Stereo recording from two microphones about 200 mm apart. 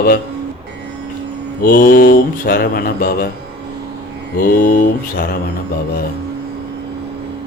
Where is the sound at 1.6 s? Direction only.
45° left (ahead or behind).